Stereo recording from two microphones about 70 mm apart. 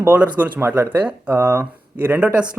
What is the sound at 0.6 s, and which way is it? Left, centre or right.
Speech, right.